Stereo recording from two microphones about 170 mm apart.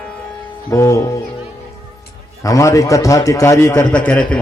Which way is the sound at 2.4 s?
20° left (ahead or behind).